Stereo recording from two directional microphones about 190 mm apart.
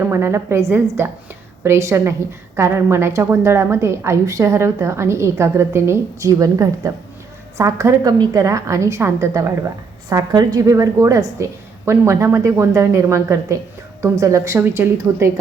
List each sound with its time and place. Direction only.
0.0 s a woman's voice: 15° right (ahead or behind)